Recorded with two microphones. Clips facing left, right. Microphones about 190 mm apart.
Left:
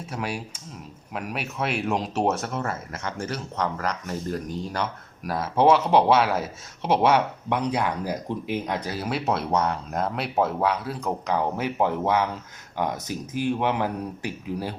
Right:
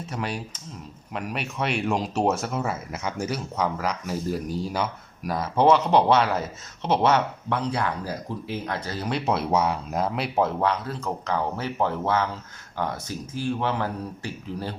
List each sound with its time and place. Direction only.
0.0 s speech: 5° left (ahead or behind)